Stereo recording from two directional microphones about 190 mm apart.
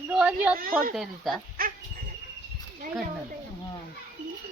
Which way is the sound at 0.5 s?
50° right (ahead or behind).